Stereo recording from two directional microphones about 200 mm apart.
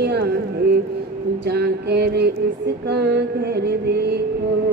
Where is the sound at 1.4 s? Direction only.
55° right (ahead or behind).